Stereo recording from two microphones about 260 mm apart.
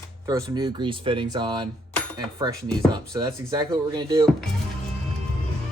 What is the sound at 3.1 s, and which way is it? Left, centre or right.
Speech, centre.